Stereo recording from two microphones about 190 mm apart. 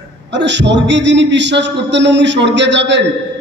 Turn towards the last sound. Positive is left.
turn(degrees=-70)  # may be behind; listen again after turning